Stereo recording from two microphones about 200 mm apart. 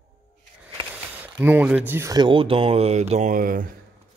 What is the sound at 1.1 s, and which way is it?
Speech, 10° right (ahead or behind).